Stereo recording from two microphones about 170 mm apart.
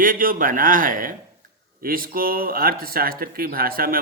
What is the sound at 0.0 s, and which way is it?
Speech, 55° right (ahead or behind).